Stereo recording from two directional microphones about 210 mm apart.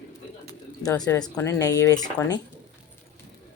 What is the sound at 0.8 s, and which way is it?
Speech, 20° left (ahead or behind).